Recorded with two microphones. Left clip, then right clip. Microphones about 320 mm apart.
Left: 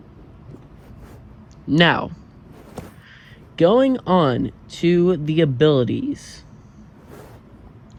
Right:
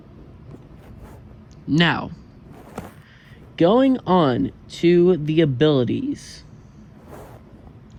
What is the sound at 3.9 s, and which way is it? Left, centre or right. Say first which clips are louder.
Speech: even; left.